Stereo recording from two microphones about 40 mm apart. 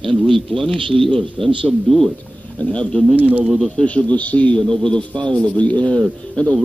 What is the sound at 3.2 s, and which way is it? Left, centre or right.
Speech, right.